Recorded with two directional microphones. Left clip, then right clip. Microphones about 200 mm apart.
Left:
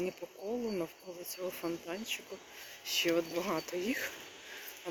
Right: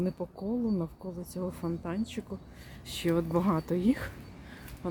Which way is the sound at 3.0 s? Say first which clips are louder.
Right 3 dB; 20° right (ahead or behind).